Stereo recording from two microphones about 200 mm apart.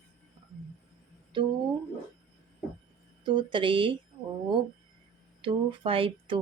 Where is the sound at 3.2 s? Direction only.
25° right (ahead or behind).